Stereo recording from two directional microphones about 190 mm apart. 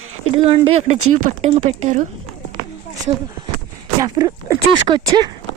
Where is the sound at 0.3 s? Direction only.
30° right (ahead or behind).